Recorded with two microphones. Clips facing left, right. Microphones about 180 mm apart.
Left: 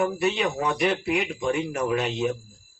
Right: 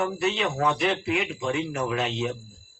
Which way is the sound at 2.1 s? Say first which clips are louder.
Left 3 dB; 10° left (ahead or behind).